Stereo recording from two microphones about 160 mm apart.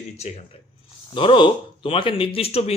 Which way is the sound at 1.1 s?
30° left (ahead or behind).